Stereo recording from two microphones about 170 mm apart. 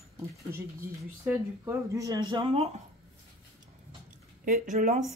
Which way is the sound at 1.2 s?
15° right (ahead or behind).